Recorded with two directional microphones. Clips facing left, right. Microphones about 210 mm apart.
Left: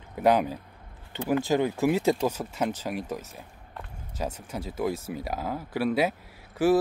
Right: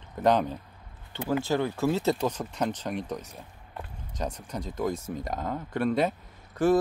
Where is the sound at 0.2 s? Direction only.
10° left (ahead or behind).